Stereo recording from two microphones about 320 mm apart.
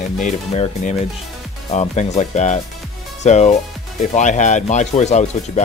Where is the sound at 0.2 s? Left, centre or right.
Left.